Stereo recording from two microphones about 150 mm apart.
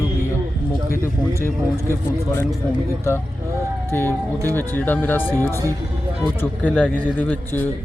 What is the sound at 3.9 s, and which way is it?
A man's voice, 15° left (ahead or behind).